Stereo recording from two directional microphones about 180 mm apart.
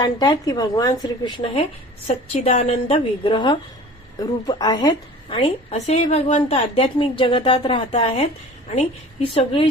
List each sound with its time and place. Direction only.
0.0 s a woman's voice: 20° left (ahead or behind)
9.3 s a woman's voice: 30° left (ahead or behind)